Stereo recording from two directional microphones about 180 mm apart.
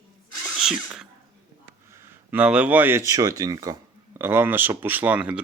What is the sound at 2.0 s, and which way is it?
Speech, 10° right (ahead or behind).